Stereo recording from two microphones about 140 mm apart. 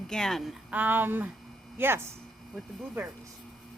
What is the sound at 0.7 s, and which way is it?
Speech, 10° right (ahead or behind).